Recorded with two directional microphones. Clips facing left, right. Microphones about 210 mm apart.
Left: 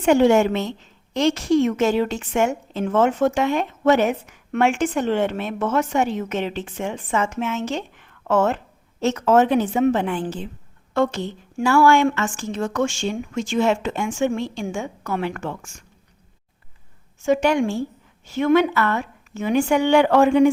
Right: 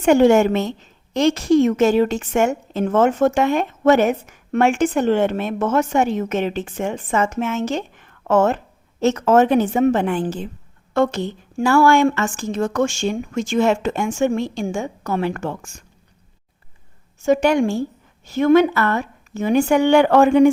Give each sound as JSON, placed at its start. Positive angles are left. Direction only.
{"t": 0.0, "sound": "a woman's voice", "side_deg": -45}
{"t": 17.2, "sound": "a woman's voice", "side_deg": -40}